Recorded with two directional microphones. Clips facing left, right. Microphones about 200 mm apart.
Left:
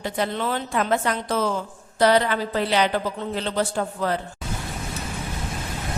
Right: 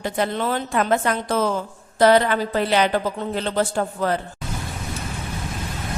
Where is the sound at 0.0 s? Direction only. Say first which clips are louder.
Right 2 dB; 45° right (ahead or behind).